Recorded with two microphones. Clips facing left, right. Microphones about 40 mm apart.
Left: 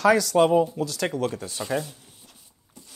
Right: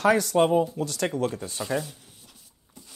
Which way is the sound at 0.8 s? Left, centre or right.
Left.